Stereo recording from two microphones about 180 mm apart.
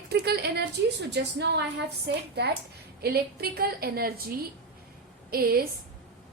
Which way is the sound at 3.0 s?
60° right (ahead or behind).